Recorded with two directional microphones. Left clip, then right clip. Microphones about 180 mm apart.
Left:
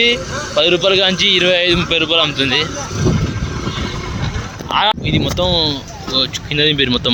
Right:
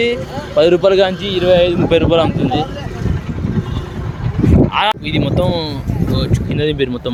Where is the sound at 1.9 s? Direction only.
25° right (ahead or behind).